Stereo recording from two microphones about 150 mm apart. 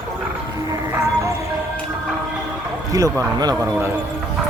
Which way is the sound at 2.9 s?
20° right (ahead or behind).